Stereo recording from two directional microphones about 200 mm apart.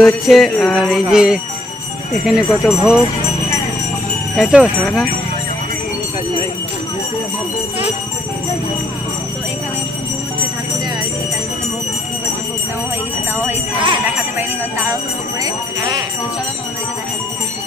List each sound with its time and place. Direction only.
0.0 s jingle bell: centre (ahead or behind)
4.4 s jingle bell: 5° right (ahead or behind)